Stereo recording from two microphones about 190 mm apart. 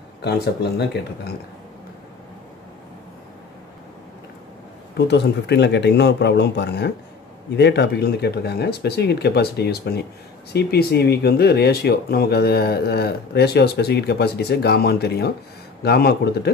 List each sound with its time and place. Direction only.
0.2 s speech: 60° left (ahead or behind)
4.9 s speech: 60° left (ahead or behind)